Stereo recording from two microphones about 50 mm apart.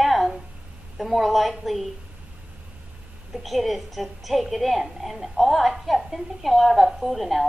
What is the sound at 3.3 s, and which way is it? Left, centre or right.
A woman's voice, centre.